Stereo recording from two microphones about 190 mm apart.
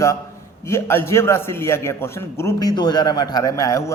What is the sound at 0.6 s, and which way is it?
A man's voice, 15° left (ahead or behind).